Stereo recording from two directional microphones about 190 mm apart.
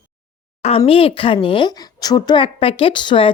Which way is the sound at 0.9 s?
30° left (ahead or behind).